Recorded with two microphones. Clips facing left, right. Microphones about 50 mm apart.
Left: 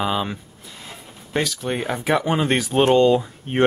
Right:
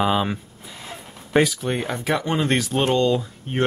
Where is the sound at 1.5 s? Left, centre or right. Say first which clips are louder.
Left 1 dB; centre.